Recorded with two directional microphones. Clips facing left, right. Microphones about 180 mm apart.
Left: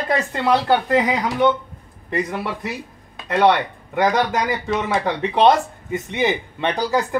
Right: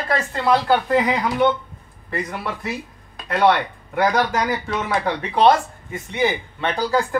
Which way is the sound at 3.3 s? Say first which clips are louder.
Left 1 dB; 20° left (ahead or behind).